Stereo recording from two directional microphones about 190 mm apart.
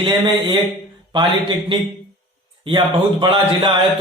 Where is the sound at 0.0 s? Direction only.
25° right (ahead or behind).